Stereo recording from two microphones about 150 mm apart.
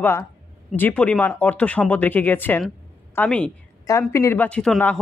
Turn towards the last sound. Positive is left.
turn(degrees=5)  # may be behind; listen again after turning